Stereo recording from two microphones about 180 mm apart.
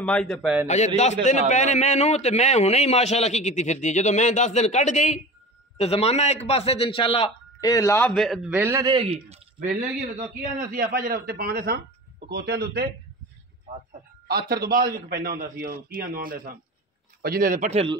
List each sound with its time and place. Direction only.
0.0 s a man's voice: 5° left (ahead or behind)
0.7 s a man's voice: 40° left (ahead or behind)
7.7 s a man's voice: 15° left (ahead or behind)
8.1 s a man's voice: centre (ahead or behind); by 8.9 s 15° right (ahead or behind)
8.9 s a man's voice: 30° right (ahead or behind)
9.6 s a man's voice: 45° right (ahead or behind)
14.2 s a man's voice: 60° right (ahead or behind)
17.6 s a man's voice: 35° right (ahead or behind)